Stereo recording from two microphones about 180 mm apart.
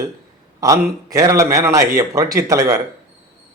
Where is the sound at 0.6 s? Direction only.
20° right (ahead or behind).